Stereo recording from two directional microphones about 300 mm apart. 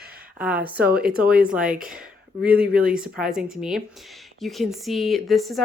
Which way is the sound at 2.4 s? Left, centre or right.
Centre.